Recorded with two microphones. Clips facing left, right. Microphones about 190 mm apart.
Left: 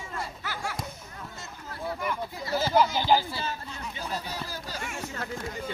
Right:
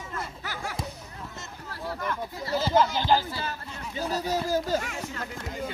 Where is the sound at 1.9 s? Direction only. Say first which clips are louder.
Right 1 dB; 10° left (ahead or behind).